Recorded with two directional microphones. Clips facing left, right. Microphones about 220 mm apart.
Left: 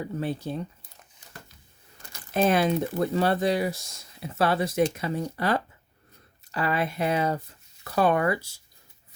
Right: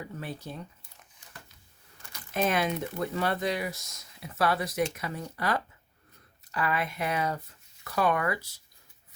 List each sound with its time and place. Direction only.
0.2 s speech: 30° left (ahead or behind)
2.0 s speech: 30° left (ahead or behind)